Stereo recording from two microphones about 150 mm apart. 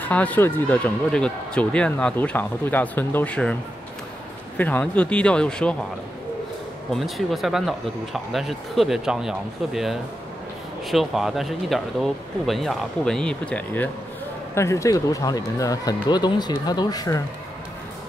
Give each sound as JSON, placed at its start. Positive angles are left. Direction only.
{"t": 0.0, "sound": "speech", "side_deg": 10}
{"t": 4.6, "sound": "speech", "side_deg": 10}
{"t": 6.9, "sound": "speech", "side_deg": 0}
{"t": 10.9, "sound": "speech", "side_deg": 0}